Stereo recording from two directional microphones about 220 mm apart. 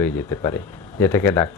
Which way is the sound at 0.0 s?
10° left (ahead or behind).